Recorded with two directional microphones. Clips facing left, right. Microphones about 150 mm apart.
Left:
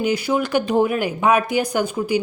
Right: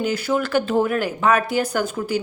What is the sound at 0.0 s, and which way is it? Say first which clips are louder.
Speech: left 2 dB; 10° left (ahead or behind).